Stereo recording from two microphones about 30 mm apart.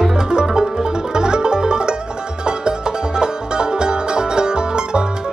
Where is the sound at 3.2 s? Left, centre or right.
Right.